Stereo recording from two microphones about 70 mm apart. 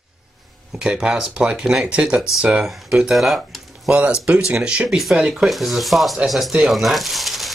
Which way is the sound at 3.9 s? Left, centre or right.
Centre.